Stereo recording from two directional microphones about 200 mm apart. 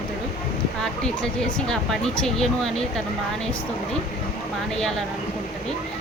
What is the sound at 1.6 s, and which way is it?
Speech, 5° left (ahead or behind).